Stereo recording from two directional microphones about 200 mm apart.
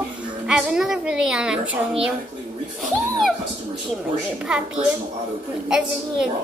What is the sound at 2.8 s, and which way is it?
Music, centre (ahead or behind).